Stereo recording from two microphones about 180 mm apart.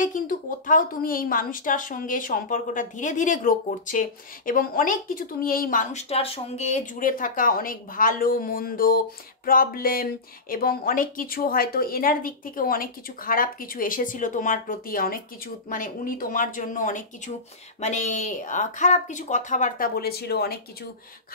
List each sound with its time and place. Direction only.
0.0 s speech: 50° left (ahead or behind)